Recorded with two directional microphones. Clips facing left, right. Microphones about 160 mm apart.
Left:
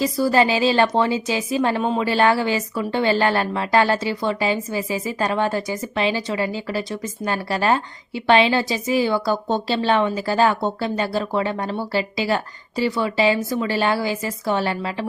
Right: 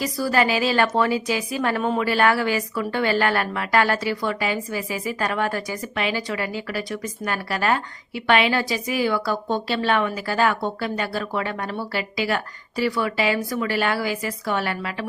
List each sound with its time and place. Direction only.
0.0 s a woman's voice: 25° left (ahead or behind)